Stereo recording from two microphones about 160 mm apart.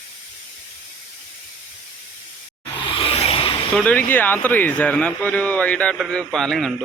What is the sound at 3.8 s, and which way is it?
Speech, 10° left (ahead or behind).